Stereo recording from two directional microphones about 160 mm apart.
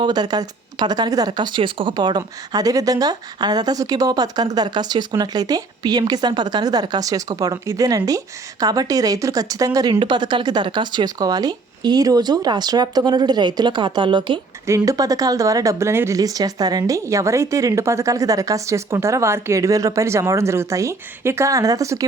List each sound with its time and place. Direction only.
0.0 s speech: 25° right (ahead or behind)